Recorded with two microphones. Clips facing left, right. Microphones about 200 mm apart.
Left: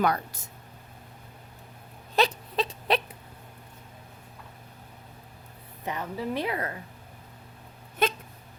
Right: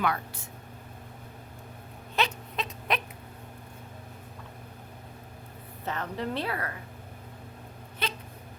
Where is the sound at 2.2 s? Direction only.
35° left (ahead or behind).